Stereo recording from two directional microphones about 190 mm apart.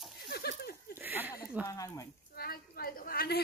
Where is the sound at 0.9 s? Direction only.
10° right (ahead or behind).